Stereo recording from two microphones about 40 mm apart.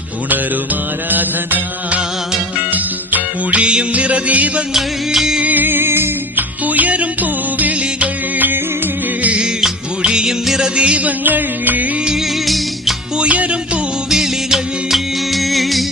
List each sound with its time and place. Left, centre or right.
1.1 s music: right
2.7 s music: right
3.6 s music: right
4.7 s music: centre
5.4 s music: right
6.7 s music: right
9.4 s music: centre
10.4 s music: centre
10.8 s music: right
11.2 s music: right
13.1 s music: right
14.1 s music of bollywood: centre
14.9 s music: centre